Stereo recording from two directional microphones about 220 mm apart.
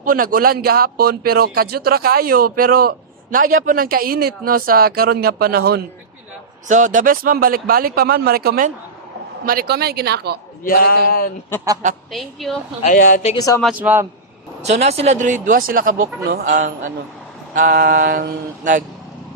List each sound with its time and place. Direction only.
0.0 s speech: 40° right (ahead or behind)
6.7 s speech: 35° right (ahead or behind)
10.6 s a man's voice: 40° left (ahead or behind)
12.1 s a woman's voice: centre (ahead or behind)
12.8 s a man's voice: 40° left (ahead or behind)
13.3 s speech: 15° left (ahead or behind)
13.6 s a man's voice: 5° right (ahead or behind)
14.6 s speech: 30° right (ahead or behind)